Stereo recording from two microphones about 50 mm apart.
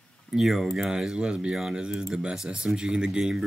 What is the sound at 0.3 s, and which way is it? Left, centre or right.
Speech, centre.